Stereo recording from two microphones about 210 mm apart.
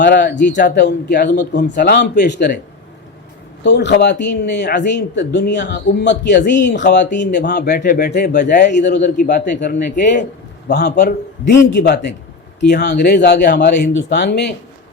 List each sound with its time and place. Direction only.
0.0 s a man's voice: 55° left (ahead or behind)
1.7 s a man's voice: 45° left (ahead or behind)
3.6 s a man's voice: 55° left (ahead or behind); by 10.2 s 35° left (ahead or behind)
10.7 s a man's voice: 50° left (ahead or behind)